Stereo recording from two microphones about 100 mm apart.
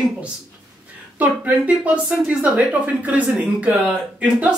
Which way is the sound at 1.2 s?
15° right (ahead or behind).